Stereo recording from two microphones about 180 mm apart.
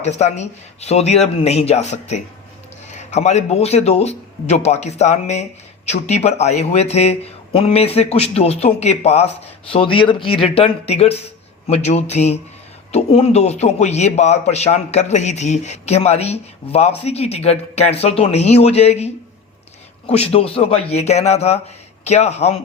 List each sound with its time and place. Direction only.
0.0 s a man's voice: 40° left (ahead or behind)